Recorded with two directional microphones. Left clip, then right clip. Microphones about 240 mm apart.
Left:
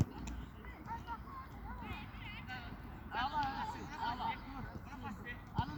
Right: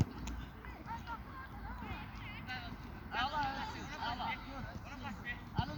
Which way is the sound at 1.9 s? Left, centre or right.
Left.